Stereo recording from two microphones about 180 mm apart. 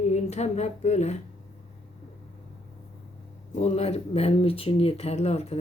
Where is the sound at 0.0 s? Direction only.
40° left (ahead or behind).